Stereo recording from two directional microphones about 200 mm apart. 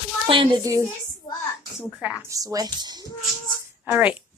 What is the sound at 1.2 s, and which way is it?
Speech, 25° left (ahead or behind).